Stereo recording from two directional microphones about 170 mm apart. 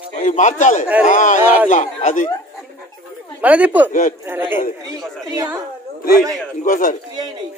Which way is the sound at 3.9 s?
50° left (ahead or behind).